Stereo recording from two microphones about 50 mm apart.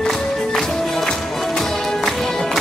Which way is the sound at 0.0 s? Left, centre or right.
Centre.